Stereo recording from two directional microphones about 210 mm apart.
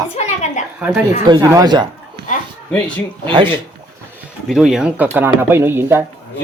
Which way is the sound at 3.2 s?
25° right (ahead or behind).